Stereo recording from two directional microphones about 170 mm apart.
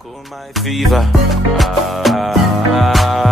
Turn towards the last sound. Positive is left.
turn(degrees=0)  # may be behind; listen again after turning